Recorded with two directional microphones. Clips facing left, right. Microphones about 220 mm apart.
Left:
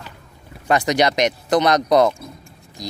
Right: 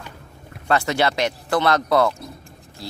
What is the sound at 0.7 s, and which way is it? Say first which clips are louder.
Speech: left 3 dB; 15° left (ahead or behind).